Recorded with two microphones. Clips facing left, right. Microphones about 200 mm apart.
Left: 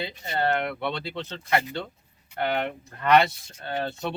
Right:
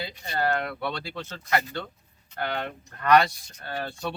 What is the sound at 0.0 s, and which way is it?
Speech, 25° left (ahead or behind).